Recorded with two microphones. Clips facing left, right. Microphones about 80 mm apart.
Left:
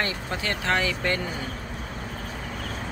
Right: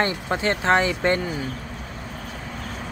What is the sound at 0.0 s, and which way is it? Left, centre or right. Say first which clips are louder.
Speech: right 6 dB; right.